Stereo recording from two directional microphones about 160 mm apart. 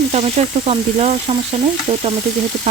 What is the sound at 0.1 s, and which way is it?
Speech, 40° right (ahead or behind).